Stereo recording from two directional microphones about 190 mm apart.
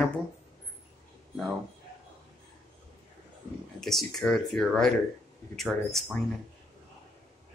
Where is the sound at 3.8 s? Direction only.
Centre (ahead or behind).